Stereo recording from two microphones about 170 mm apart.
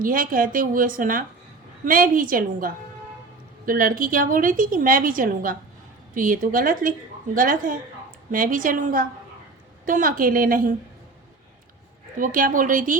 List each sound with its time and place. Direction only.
0.0 s a woman's voice: 55° right (ahead or behind)
12.1 s a woman's voice: 50° right (ahead or behind)